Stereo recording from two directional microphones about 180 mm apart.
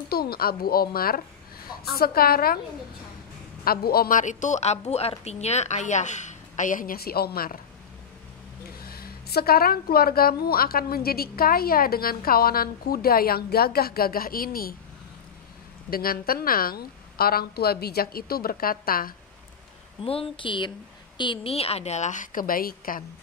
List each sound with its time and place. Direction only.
0.1 s a woman's voice: 60° left (ahead or behind)
3.6 s a woman's voice: 55° left (ahead or behind)
8.8 s a woman's voice: 55° left (ahead or behind)
15.9 s a woman's voice: 55° left (ahead or behind)
20.1 s a woman's voice: 30° left (ahead or behind); by 23.0 s 55° left (ahead or behind)